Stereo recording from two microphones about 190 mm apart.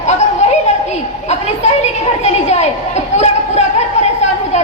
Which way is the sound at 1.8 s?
35° left (ahead or behind).